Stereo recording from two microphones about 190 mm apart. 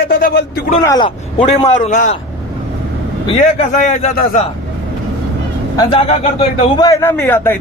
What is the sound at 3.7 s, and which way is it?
Speech, 40° left (ahead or behind).